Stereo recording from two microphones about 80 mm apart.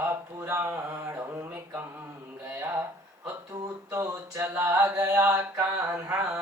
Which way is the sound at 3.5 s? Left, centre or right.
Right.